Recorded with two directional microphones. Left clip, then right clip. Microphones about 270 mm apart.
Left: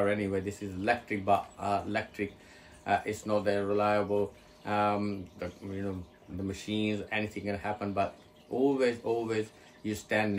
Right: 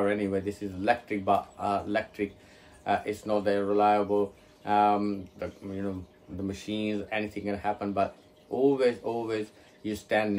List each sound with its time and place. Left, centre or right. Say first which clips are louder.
0.0 s speech: right 2 dB; centre